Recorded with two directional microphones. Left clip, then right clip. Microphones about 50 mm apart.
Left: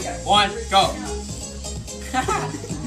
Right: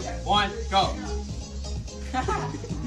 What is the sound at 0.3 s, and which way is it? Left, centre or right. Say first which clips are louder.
Speech: left 6 dB; centre.